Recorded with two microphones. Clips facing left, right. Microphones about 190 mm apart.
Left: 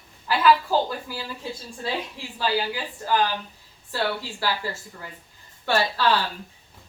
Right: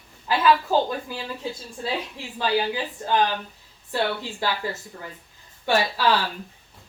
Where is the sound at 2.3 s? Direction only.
20° right (ahead or behind).